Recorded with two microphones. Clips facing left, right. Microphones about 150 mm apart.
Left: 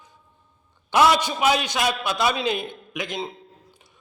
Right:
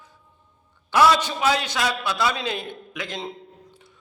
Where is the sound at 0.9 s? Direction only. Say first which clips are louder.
Even; 20° left (ahead or behind).